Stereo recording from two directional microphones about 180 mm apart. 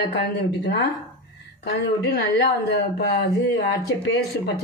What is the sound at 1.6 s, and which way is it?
Speech, 65° left (ahead or behind).